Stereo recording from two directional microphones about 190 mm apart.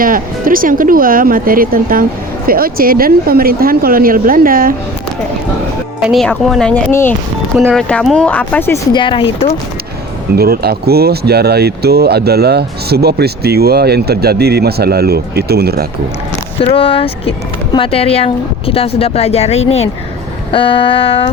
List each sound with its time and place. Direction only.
0.0 s speech: 50° right (ahead or behind)
6.0 s speech: centre (ahead or behind)
7.5 s speech: 10° right (ahead or behind)
7.8 s speech: 5° left (ahead or behind)
8.9 s a sound: 25° left (ahead or behind)
10.3 s speech: 55° right (ahead or behind)
16.6 s speech: 30° left (ahead or behind)
20.5 s a sound: 30° left (ahead or behind)